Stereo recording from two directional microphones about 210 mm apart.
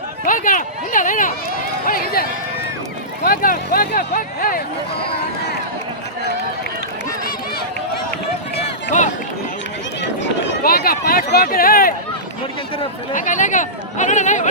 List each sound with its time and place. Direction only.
0.3 s a sound: 40° left (ahead or behind)
1.9 s speech: 45° left (ahead or behind)
3.2 s speech: 45° left (ahead or behind)
8.5 s run: 30° left (ahead or behind)
10.6 s speech: 45° left (ahead or behind)
13.1 s speech: 35° left (ahead or behind)